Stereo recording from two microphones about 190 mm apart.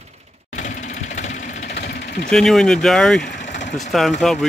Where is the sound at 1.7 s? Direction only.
60° left (ahead or behind).